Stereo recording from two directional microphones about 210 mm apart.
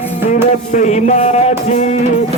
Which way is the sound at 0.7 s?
35° left (ahead or behind).